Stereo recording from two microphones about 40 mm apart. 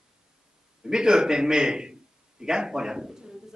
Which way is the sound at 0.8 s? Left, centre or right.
Centre.